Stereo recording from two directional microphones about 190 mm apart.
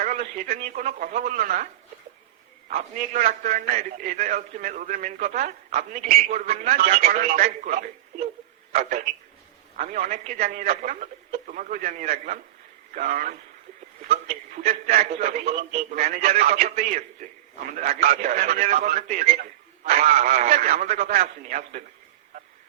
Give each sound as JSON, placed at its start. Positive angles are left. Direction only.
{"t": 0.0, "sound": "a man's voice", "side_deg": -45}
{"t": 2.6, "sound": "a man's voice", "side_deg": -45}
{"t": 16.3, "sound": "a man's voice", "side_deg": -35}